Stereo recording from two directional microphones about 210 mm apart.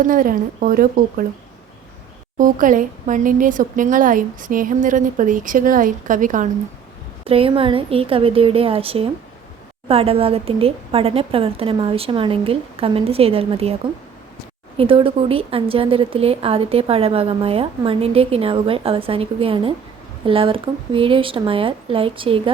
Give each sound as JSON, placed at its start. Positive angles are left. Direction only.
{"t": 0.1, "sound": "a woman's voice", "side_deg": -40}
{"t": 2.4, "sound": "a woman's voice", "side_deg": -40}
{"t": 7.3, "sound": "speech", "side_deg": -25}
{"t": 14.8, "sound": "speech", "side_deg": -25}